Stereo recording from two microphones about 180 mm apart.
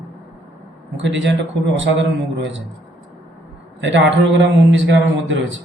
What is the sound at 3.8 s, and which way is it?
A man's voice, 75° right (ahead or behind).